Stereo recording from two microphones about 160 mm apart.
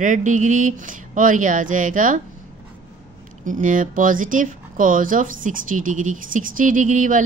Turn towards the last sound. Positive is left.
turn(degrees=-55)  # may be behind; listen again after turning